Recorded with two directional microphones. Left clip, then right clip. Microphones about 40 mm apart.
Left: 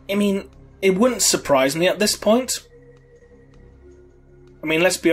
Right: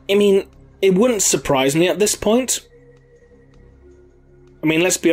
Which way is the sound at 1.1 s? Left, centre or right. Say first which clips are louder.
Right 1 dB; left.